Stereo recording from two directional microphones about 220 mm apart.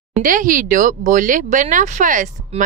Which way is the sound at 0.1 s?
35° right (ahead or behind).